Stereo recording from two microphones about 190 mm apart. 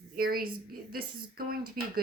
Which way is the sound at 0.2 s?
50° right (ahead or behind).